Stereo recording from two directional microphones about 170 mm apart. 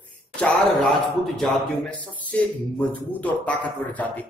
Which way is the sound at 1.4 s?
5° left (ahead or behind).